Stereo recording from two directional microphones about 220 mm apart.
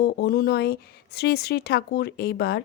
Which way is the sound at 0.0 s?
45° left (ahead or behind).